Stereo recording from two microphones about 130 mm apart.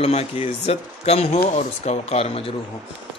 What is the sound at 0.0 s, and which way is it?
Speech, 50° left (ahead or behind).